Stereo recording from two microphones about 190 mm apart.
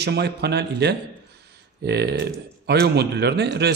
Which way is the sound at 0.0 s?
60° right (ahead or behind).